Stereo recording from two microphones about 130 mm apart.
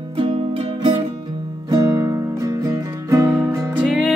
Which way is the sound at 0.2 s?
50° right (ahead or behind).